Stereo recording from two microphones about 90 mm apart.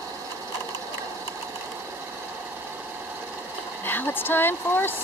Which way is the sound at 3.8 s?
25° left (ahead or behind).